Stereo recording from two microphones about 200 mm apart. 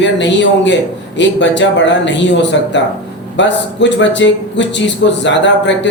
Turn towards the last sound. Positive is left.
turn(degrees=65)  # may be behind; listen again after turning